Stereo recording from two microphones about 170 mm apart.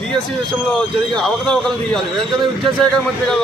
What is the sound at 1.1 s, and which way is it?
Speech, 5° left (ahead or behind).